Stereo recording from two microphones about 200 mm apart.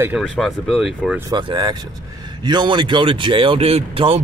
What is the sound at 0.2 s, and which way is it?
Speech, centre (ahead or behind).